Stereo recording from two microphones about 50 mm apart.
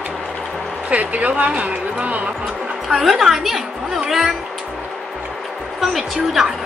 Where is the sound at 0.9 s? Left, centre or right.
Right.